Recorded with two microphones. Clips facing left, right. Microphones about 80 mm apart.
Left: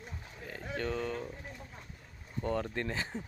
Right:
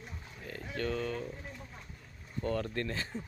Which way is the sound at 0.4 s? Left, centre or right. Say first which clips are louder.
Even; centre.